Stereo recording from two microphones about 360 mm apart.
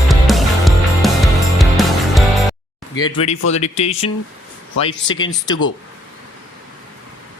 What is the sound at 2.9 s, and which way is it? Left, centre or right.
Speech, centre.